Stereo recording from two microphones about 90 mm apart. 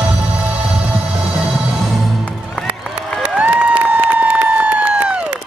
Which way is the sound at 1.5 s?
Centre (ahead or behind).